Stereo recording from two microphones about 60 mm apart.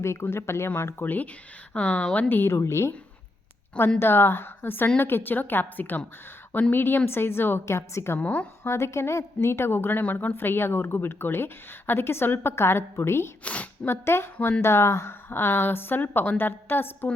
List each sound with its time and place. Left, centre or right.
0.0 s a woman's voice: left
1.0 s speech: left
1.7 s a woman's voice: centre
2.3 s a woman's voice: left
4.0 s speech: left
8.2 s a woman's voice: left
8.6 s a woman's voice: left
10.0 s speech: left
13.4 s speech: left
13.8 s a woman's voice: left